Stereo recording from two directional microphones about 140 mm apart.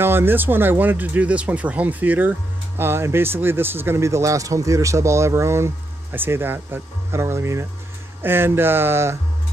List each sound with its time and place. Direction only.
0.0 s speech: 15° right (ahead or behind)